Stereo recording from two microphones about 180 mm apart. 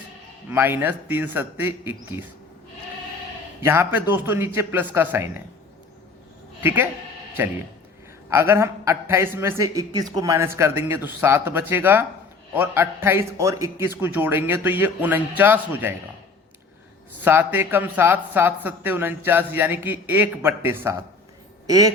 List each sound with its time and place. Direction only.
0.5 s speech: 10° right (ahead or behind)
3.6 s speech: 15° right (ahead or behind)
6.6 s speech: 10° right (ahead or behind)
8.3 s speech: 15° right (ahead or behind)
17.2 s speech: 10° right (ahead or behind)